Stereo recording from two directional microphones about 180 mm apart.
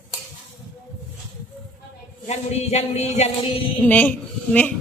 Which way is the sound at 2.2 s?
35° left (ahead or behind).